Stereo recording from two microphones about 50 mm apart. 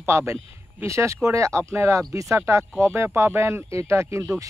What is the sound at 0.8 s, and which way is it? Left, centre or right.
Speech, right.